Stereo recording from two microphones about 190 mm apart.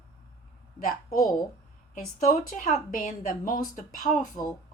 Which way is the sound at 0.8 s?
50° left (ahead or behind).